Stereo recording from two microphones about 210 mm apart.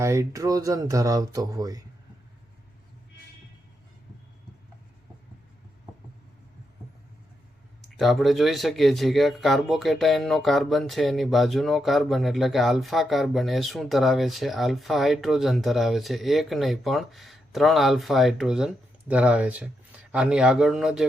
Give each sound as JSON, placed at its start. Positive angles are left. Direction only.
{"t": 0.0, "sound": "speech", "side_deg": -15}
{"t": 7.9, "sound": "speech", "side_deg": 0}